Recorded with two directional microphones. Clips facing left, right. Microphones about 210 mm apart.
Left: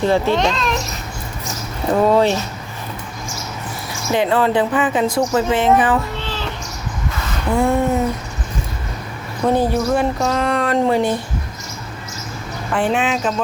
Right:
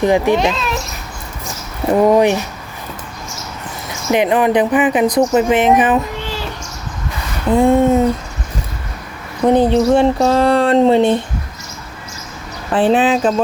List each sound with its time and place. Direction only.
0.0 s a child's voice: 15° right (ahead or behind)
1.9 s speech: 15° right (ahead or behind)
4.1 s speech: 20° right (ahead or behind)
7.5 s speech: 20° right (ahead or behind)
9.5 s speech: 20° right (ahead or behind)
12.7 s speech: 35° right (ahead or behind)